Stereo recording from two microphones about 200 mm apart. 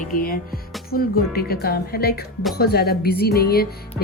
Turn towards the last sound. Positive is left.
turn(degrees=50)  # may be behind; listen again after turning